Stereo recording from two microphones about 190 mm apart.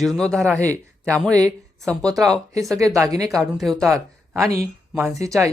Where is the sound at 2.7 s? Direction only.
15° right (ahead or behind).